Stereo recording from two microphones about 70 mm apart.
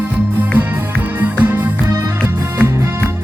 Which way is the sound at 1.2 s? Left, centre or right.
Right.